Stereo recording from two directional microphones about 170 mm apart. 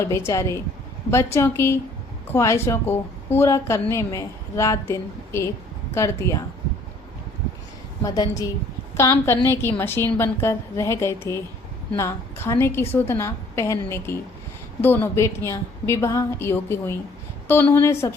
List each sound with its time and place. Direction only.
0.3 s a woman's voice: 15° left (ahead or behind)
8.0 s a woman's voice: 20° left (ahead or behind)